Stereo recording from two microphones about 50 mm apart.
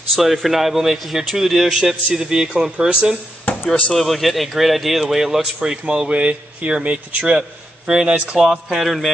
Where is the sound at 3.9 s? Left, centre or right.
Centre.